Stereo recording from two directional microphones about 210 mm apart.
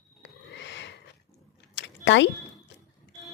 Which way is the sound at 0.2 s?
55° left (ahead or behind).